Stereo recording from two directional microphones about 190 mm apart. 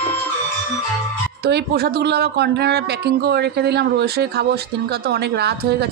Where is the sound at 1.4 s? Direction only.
60° right (ahead or behind).